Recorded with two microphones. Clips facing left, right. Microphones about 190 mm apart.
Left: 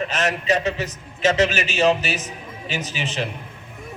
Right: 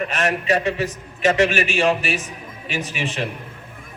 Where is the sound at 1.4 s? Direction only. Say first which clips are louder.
Even; 20° left (ahead or behind).